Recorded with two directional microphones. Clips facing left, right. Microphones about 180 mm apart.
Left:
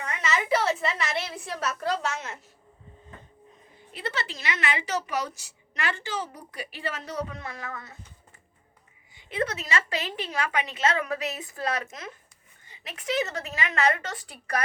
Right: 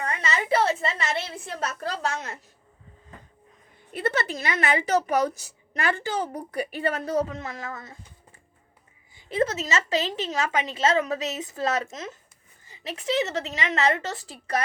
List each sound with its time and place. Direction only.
0.0 s a woman's voice: 35° right (ahead or behind)
3.9 s a woman's voice: 55° right (ahead or behind)
7.3 s a woman's voice: 25° right (ahead or behind)
9.3 s a woman's voice: 25° right (ahead or behind)